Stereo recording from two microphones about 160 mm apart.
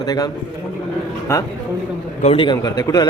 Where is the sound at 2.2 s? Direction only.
35° left (ahead or behind).